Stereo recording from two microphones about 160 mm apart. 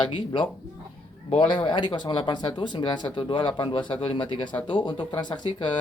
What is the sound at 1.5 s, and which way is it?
Speech, 30° left (ahead or behind).